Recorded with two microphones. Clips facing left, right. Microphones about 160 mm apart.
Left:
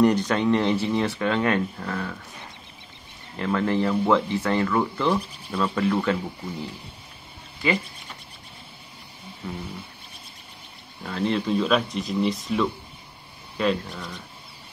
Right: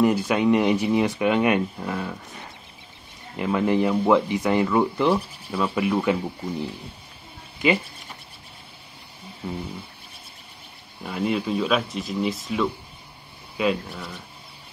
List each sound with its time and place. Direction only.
0.0 s speech: 5° right (ahead or behind)
3.3 s speech: 15° right (ahead or behind)
7.5 s speech: 20° right (ahead or behind)
11.0 s speech: 10° right (ahead or behind)